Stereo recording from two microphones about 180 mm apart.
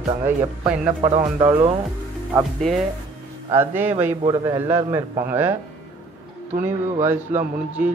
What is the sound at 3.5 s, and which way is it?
Speech, 10° right (ahead or behind).